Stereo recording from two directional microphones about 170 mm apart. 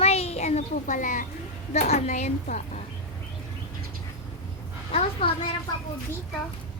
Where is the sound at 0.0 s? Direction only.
35° left (ahead or behind).